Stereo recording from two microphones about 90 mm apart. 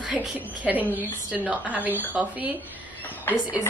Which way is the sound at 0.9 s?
15° right (ahead or behind).